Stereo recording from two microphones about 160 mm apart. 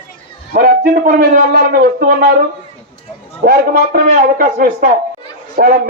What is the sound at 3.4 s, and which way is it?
A man's voice, 65° right (ahead or behind).